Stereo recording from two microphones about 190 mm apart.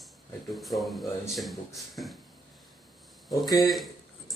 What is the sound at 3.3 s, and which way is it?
Speech, 20° left (ahead or behind).